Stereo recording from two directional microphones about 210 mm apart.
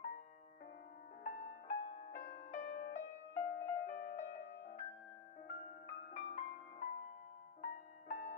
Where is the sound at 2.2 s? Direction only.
40° left (ahead or behind).